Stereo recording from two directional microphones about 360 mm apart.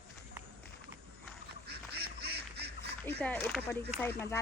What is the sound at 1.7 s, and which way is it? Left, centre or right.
Duck, right.